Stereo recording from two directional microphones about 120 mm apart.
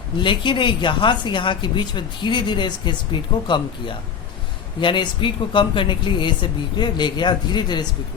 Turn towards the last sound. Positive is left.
turn(degrees=40)  # may be behind; listen again after turning